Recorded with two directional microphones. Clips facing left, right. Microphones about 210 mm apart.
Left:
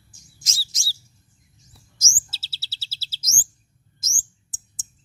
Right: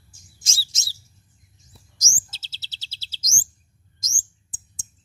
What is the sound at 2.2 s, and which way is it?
Chirp, 5° left (ahead or behind).